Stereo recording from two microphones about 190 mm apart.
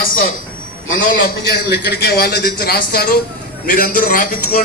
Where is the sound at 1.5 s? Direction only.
55° left (ahead or behind).